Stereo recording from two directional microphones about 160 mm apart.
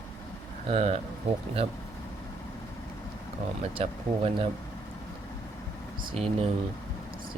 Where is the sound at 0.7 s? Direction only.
40° right (ahead or behind).